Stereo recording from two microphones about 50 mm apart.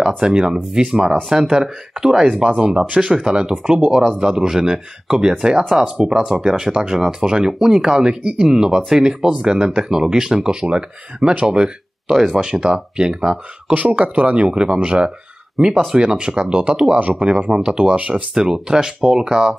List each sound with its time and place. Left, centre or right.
0.2 s speech: centre
13.7 s speech: right
17.5 s speech: centre
18.3 s speech: centre